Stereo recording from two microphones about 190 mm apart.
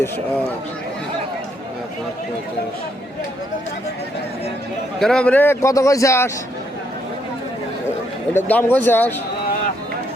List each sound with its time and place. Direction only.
4.9 s a man's voice: 5° left (ahead or behind)
8.3 s a man's voice: 10° left (ahead or behind)